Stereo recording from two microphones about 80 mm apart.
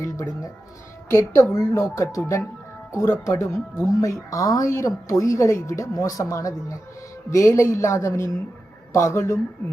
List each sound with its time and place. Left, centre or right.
0.0 s a woman's voice: left